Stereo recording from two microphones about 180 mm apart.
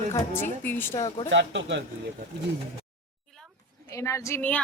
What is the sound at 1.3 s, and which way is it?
Speech, 90° right.